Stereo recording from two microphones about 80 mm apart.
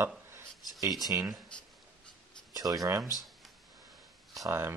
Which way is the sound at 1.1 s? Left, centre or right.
Right.